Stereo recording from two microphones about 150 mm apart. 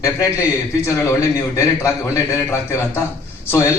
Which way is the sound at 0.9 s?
20° left (ahead or behind).